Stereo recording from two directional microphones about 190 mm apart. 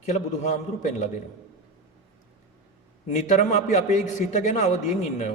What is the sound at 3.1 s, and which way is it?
A man's voice, 40° left (ahead or behind).